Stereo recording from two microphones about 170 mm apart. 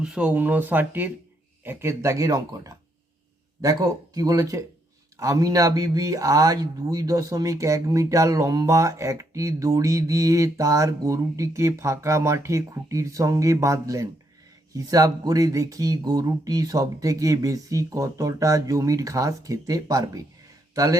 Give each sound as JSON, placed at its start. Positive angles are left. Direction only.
{"t": 0.0, "sound": "speech", "side_deg": -5}